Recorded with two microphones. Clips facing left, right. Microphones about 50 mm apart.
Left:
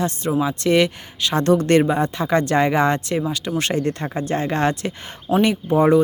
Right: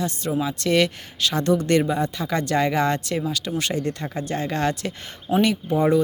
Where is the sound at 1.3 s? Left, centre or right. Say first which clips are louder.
Left 4 dB; left.